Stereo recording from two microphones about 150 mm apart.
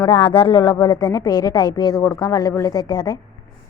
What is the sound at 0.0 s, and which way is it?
A woman's voice, 35° left (ahead or behind).